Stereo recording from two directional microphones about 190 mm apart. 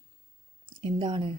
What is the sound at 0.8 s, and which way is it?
Speech, 25° right (ahead or behind).